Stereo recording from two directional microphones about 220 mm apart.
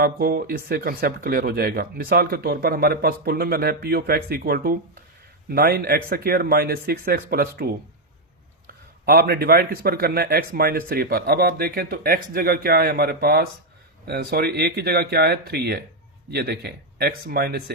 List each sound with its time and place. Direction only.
0.0 s speech: 45° right (ahead or behind)
9.0 s speech: 45° right (ahead or behind)